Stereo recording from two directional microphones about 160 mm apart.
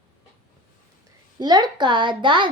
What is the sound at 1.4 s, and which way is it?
A woman's voice, 25° right (ahead or behind).